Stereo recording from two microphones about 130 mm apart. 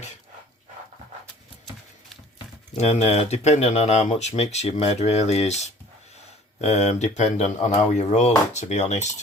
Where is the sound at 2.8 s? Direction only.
60° left (ahead or behind).